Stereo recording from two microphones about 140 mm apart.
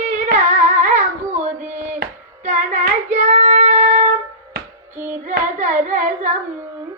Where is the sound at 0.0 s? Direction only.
60° right (ahead or behind).